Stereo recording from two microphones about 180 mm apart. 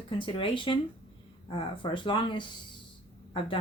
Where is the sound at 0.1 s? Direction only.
30° left (ahead or behind).